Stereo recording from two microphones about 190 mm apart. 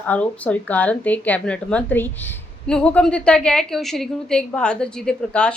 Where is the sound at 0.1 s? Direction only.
5° left (ahead or behind).